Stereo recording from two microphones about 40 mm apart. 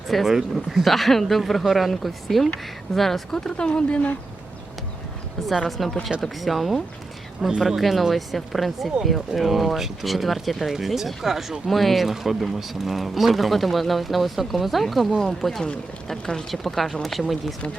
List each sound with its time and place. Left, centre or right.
0.1 s speech: centre
3.3 s speech: left
5.6 s speech: centre
7.4 s speech: centre
7.8 s speech: centre
16.5 s speech: centre